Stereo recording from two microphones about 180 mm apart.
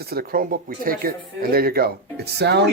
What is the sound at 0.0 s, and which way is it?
Speech, 60° right (ahead or behind).